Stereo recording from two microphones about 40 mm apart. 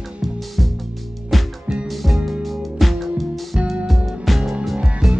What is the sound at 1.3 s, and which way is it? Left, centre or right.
Music, centre.